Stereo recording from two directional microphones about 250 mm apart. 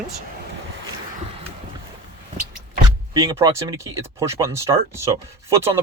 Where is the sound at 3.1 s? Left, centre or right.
Centre.